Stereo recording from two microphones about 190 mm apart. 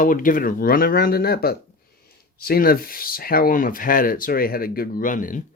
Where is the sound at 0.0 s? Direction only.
45° left (ahead or behind).